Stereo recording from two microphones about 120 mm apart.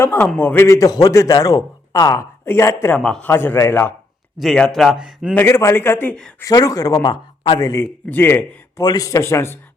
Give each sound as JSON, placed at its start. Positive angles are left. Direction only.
{"t": 0.0, "sound": "a man's voice", "side_deg": 15}
{"t": 2.9, "sound": "a man's voice", "side_deg": 5}
{"t": 3.2, "sound": "a man's voice", "side_deg": 15}
{"t": 4.4, "sound": "speech", "side_deg": 5}
{"t": 5.3, "sound": "a man's voice", "side_deg": 20}
{"t": 6.4, "sound": "speech", "side_deg": 30}
{"t": 8.1, "sound": "a man's voice", "side_deg": 20}
{"t": 8.8, "sound": "a man's voice", "side_deg": 30}